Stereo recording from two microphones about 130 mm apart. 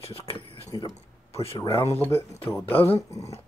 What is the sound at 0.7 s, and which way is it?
Speech, 35° left (ahead or behind).